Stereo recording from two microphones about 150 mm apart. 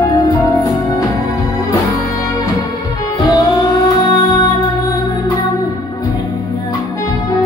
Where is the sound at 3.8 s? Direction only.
30° left (ahead or behind).